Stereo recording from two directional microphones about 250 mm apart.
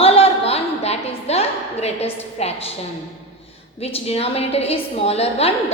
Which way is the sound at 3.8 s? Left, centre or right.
Left.